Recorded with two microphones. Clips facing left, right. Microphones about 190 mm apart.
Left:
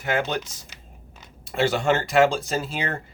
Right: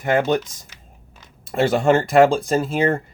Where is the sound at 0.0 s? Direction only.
55° right (ahead or behind).